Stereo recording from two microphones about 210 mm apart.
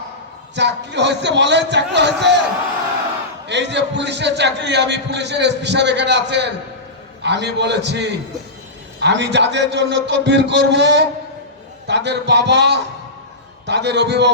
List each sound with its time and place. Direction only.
0.5 s a man's voice: 55° right (ahead or behind)
3.4 s a man's voice: 55° right (ahead or behind)